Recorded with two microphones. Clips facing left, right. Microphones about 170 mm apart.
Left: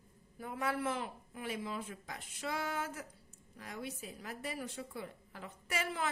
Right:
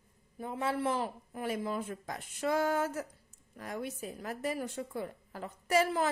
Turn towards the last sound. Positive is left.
turn(degrees=-40)  # may be behind; listen again after turning